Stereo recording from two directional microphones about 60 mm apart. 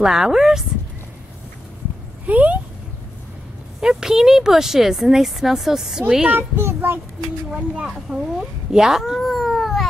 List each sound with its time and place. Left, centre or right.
0.0 s speech: centre
2.2 s a sound: right
3.8 s speech: centre
6.2 s a child's voice: right
6.6 s a sound: right
7.5 s speech: centre